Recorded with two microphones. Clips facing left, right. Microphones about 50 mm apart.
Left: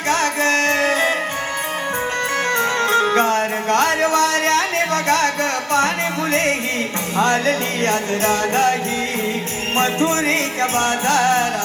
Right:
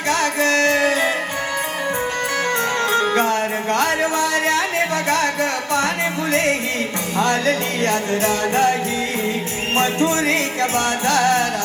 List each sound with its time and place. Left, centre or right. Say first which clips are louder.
0.4 s music: right 2 dB; left
2.6 s music: left 3 dB; left
5.4 s music: left 2 dB; left
7.2 s music: left 1 dB; left
9.7 s music: even; left